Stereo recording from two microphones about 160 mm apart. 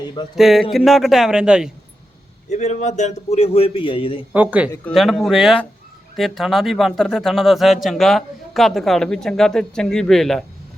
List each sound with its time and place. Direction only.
0.3 s speech: centre (ahead or behind)
2.5 s a man's voice: 45° left (ahead or behind)
4.4 s speech: 10° right (ahead or behind)
4.9 s speech: centre (ahead or behind)